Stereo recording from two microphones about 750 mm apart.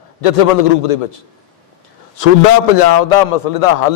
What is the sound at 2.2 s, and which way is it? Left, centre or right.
Speech, left.